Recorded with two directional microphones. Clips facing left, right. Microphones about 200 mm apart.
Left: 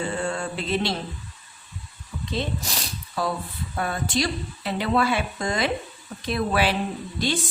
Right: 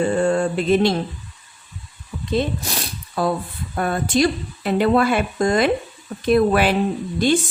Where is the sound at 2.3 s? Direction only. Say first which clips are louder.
Right 7 dB; 55° right (ahead or behind).